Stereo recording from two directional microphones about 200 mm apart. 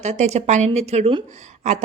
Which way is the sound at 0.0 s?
35° right (ahead or behind).